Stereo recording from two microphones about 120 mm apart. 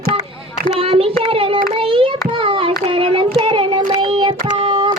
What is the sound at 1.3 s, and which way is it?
Child singing, 50° right (ahead or behind).